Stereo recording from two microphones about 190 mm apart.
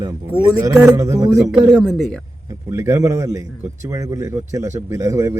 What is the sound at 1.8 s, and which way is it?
Speech, centre (ahead or behind).